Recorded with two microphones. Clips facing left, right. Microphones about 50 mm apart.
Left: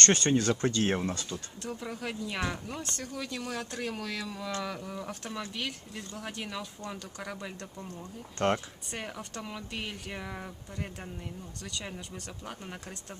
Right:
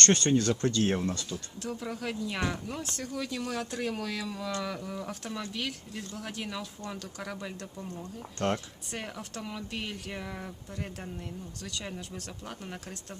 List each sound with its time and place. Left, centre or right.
0.0 s speech: centre
1.6 s speech: centre
8.4 s speech: centre
8.9 s speech: centre